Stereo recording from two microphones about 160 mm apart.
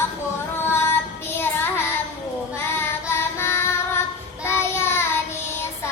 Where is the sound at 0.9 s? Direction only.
15° left (ahead or behind).